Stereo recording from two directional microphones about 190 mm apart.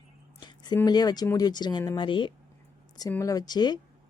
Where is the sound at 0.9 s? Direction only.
20° left (ahead or behind).